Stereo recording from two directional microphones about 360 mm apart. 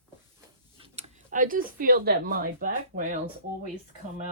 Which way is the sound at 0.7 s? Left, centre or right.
Centre.